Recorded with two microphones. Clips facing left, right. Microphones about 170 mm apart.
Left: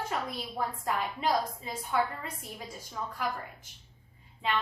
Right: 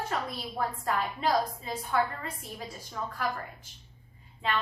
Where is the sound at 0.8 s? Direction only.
15° left (ahead or behind).